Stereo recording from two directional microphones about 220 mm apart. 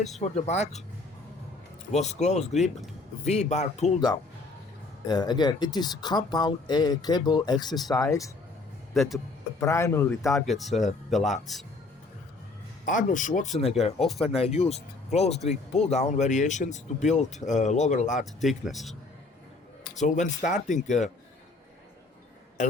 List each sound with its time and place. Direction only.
0.2 s speech: 30° left (ahead or behind)
1.9 s speech: 30° left (ahead or behind)
5.0 s speech: 20° left (ahead or behind)
8.9 s speech: centre (ahead or behind)
9.6 s a man's voice: 10° left (ahead or behind)
10.4 s speech: centre (ahead or behind)
12.8 s speech: 35° left (ahead or behind)
18.3 s speech: centre (ahead or behind)
20.0 s speech: 35° left (ahead or behind)